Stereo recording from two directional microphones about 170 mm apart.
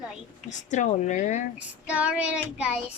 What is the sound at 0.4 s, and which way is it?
Speech, 45° left (ahead or behind).